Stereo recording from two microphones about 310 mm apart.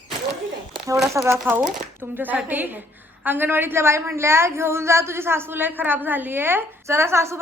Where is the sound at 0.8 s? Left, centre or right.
Centre.